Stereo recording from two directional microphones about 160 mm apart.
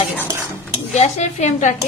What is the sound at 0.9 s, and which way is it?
Speech, 45° left (ahead or behind).